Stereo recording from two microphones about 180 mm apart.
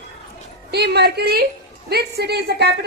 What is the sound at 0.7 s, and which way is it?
A woman's voice, 65° right (ahead or behind).